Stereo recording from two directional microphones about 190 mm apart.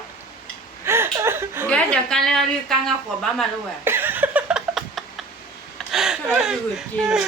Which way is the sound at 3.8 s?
10° right (ahead or behind).